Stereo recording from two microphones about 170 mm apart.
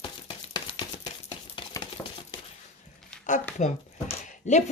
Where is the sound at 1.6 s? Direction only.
25° left (ahead or behind).